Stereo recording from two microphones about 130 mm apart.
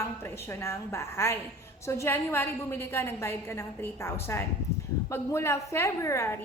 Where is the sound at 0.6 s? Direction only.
20° left (ahead or behind).